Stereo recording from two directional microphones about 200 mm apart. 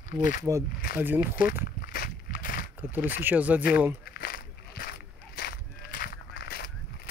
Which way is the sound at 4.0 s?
50° left (ahead or behind).